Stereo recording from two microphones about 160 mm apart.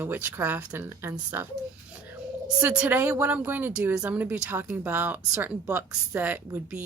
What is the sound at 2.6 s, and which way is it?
Speech, 10° right (ahead or behind).